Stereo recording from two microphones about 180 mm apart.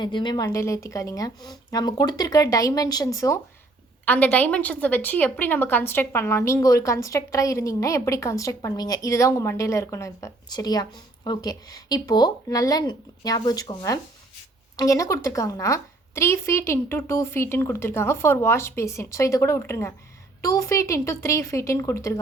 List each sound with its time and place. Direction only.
0.0 s a woman's voice: 25° left (ahead or behind)